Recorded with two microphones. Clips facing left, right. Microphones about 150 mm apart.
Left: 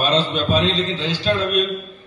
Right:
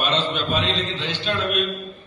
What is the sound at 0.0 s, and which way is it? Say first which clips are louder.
A man's voice: left 4 dB; 35° left (ahead or behind).